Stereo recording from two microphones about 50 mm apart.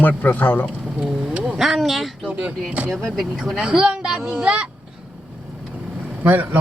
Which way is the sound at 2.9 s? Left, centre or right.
Centre.